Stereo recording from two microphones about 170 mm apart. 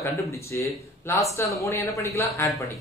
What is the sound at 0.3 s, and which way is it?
Speech, 15° left (ahead or behind).